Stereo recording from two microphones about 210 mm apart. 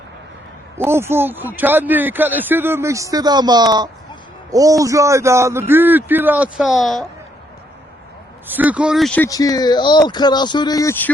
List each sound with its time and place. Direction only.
0.8 s speech: 10° right (ahead or behind)
8.4 s speech: 5° right (ahead or behind); by 11.1 s 10° left (ahead or behind)